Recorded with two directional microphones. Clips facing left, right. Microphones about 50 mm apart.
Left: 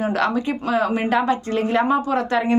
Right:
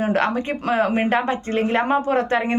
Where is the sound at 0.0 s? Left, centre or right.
Right.